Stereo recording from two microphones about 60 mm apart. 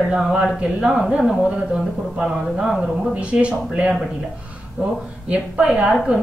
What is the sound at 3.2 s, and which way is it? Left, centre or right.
Speech, centre.